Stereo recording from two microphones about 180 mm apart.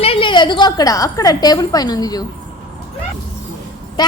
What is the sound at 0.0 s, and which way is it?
A woman's voice, 30° left (ahead or behind).